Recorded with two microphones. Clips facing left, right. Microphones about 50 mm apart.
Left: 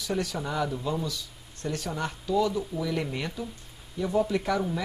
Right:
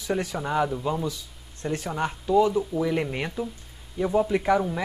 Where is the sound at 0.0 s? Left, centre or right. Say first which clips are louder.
Right 3 dB; right.